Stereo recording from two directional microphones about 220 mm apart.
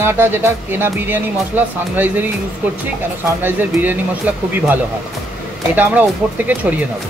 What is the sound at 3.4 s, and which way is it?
Speech, 10° right (ahead or behind).